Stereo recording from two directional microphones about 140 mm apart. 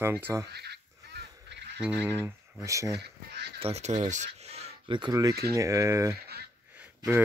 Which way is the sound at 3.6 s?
50° right (ahead or behind).